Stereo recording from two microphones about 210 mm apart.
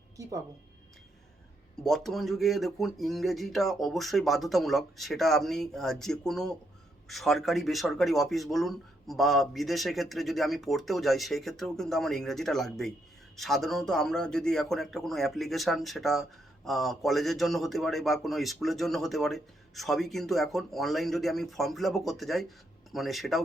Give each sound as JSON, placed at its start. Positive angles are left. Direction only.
{"t": 0.2, "sound": "speech", "side_deg": -15}
{"t": 1.8, "sound": "a man's voice", "side_deg": 0}